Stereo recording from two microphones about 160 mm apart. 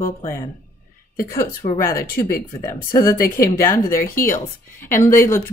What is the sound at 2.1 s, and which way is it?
Speech, 70° left (ahead or behind).